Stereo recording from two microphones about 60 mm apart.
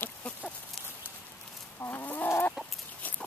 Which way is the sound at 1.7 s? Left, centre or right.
Left.